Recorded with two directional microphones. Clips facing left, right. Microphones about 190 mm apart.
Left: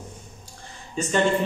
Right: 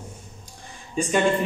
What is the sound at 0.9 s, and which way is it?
Speech, 15° right (ahead or behind).